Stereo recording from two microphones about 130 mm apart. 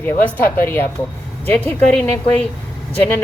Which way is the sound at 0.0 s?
15° left (ahead or behind).